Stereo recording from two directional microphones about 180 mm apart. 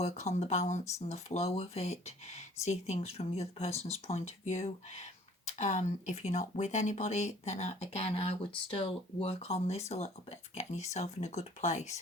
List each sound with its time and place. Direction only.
0.0 s speech: 40° left (ahead or behind)